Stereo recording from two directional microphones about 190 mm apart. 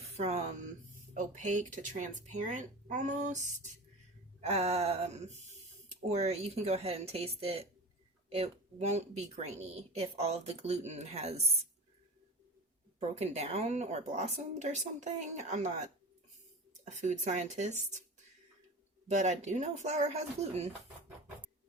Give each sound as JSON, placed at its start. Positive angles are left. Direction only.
{"t": 0.2, "sound": "speech", "side_deg": -35}
{"t": 13.0, "sound": "speech", "side_deg": -35}
{"t": 19.0, "sound": "speech", "side_deg": -35}